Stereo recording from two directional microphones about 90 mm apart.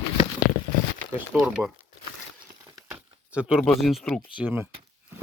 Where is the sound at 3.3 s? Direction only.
10° right (ahead or behind).